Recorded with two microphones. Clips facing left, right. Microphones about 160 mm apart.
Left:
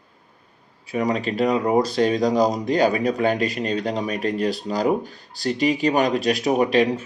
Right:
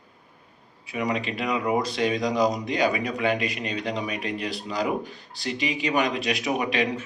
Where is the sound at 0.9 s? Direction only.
40° left (ahead or behind).